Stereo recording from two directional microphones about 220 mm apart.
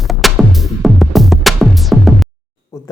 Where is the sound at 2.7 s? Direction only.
15° left (ahead or behind).